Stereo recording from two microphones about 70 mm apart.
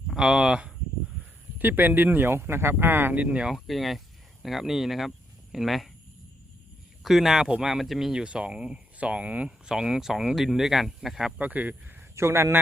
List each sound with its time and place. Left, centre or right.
0.2 s speech: centre
1.5 s speech: right
3.7 s speech: centre
7.0 s speech: centre
11.3 s speech: right
12.1 s a man's voice: right